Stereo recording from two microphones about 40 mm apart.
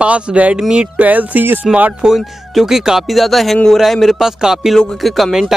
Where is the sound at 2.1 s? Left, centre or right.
Centre.